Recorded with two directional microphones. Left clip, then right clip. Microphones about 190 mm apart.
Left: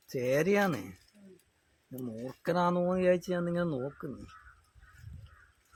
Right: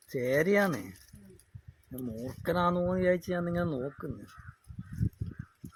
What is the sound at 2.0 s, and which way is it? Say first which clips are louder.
Speech: right 1 dB; 15° right (ahead or behind).